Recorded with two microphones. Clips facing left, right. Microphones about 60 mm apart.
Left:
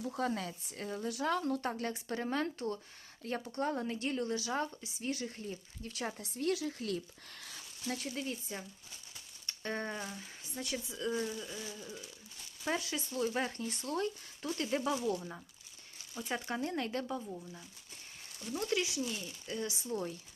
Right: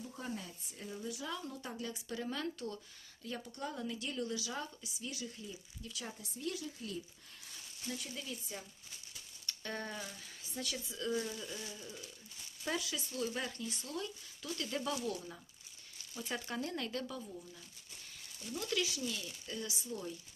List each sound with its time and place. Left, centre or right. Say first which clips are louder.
0.0 s speech: left 8 dB; left
8.1 s speech: left 5 dB; left
9.5 s speech: left 4 dB; left
11.3 s speech: left 2 dB; centre
11.7 s speech: left 3 dB; left
12.8 s speech: left 4 dB; left
14.8 s speech: left 2 dB; left